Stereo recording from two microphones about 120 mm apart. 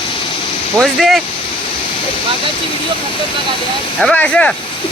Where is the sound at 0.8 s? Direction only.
Centre (ahead or behind).